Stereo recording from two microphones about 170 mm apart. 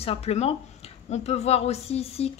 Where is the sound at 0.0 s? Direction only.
35° left (ahead or behind).